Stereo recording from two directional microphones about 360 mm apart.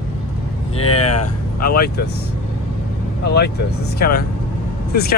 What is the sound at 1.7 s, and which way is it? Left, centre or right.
Speech, left.